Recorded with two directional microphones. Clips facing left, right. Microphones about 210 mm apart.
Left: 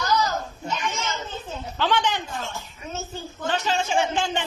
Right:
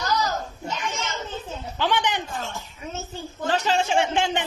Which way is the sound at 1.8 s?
15° right (ahead or behind).